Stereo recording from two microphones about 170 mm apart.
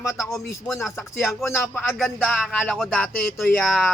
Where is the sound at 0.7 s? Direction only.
Centre (ahead or behind).